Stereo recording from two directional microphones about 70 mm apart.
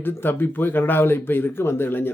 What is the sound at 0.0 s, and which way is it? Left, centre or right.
Speech, left.